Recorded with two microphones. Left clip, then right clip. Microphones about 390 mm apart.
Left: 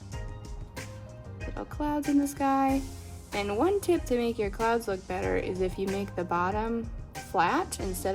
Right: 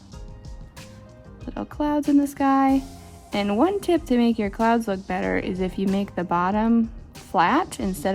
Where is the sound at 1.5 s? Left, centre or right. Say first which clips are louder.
Right 7 dB; right.